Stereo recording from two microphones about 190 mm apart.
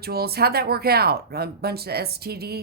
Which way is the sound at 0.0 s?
55° right (ahead or behind).